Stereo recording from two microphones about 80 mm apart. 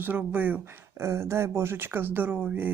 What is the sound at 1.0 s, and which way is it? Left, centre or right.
Speech, right.